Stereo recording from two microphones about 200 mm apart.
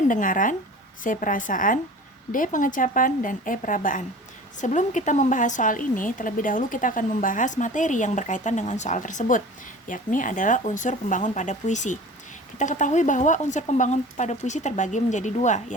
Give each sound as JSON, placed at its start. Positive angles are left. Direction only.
{"t": 0.1, "sound": "a woman's voice", "side_deg": 40}